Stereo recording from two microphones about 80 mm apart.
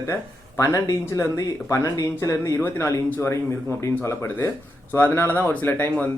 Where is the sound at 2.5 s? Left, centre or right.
Left.